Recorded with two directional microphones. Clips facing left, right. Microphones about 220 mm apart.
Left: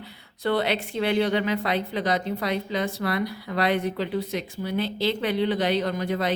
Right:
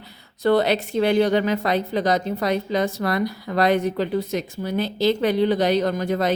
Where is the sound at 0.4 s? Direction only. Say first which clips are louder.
Right 6 dB; 40° right (ahead or behind).